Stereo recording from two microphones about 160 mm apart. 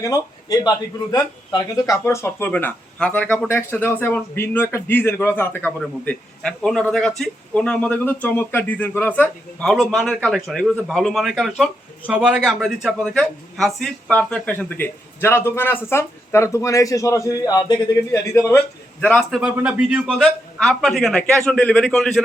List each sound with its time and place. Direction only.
0.0 s a man's voice: 25° left (ahead or behind)
19.4 s a man's voice: 10° right (ahead or behind)